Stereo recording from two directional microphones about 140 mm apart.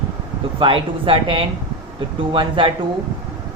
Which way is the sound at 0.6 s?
40° right (ahead or behind).